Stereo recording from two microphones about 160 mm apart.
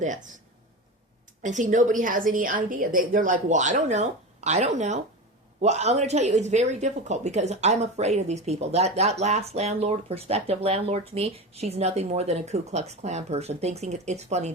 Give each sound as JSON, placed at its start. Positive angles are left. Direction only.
{"t": 0.0, "sound": "speech", "side_deg": -50}
{"t": 1.4, "sound": "speech", "side_deg": -50}